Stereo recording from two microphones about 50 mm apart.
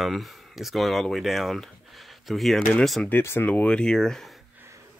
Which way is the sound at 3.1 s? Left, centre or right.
Left.